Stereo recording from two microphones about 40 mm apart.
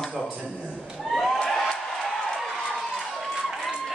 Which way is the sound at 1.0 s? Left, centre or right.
Centre.